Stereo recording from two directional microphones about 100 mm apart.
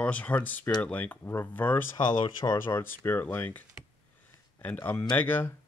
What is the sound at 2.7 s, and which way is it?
Speech, 25° left (ahead or behind).